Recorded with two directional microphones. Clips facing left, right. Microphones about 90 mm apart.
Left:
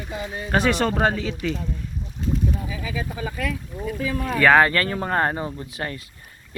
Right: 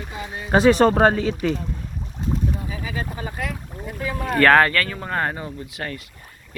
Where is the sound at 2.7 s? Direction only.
50° right (ahead or behind).